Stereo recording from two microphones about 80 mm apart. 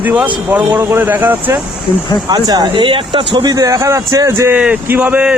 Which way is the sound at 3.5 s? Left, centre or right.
Right.